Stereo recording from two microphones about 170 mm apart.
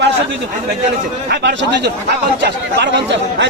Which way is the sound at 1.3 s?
80° right.